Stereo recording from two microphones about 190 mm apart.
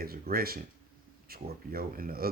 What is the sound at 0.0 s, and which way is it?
Speech, 50° right (ahead or behind).